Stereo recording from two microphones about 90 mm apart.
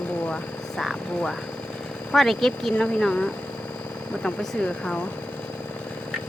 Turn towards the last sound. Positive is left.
turn(degrees=15)  # may be behind; listen again after turning